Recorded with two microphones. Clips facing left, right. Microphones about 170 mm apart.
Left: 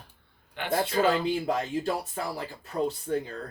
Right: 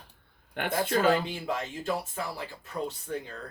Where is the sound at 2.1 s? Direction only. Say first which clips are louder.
Left 2 dB; 35° left (ahead or behind).